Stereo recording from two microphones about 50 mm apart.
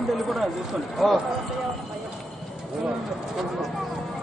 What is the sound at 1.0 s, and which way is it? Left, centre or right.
Speech, centre.